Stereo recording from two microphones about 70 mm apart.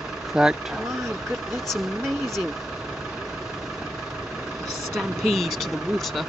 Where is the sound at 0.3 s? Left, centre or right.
Centre.